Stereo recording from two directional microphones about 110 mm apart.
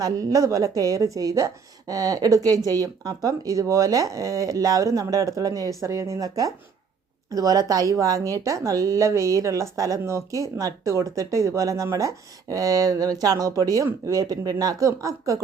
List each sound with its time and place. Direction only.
0.0 s a woman's voice: 35° right (ahead or behind)